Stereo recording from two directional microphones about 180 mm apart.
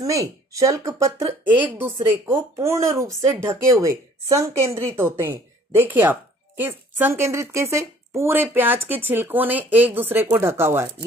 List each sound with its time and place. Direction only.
0.0 s speech: 20° right (ahead or behind)